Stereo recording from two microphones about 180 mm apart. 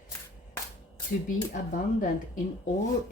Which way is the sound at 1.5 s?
50° left (ahead or behind).